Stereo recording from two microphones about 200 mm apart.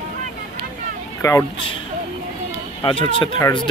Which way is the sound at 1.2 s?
15° left (ahead or behind).